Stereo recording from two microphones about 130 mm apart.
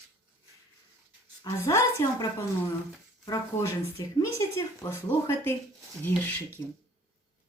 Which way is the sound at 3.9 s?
20° left (ahead or behind).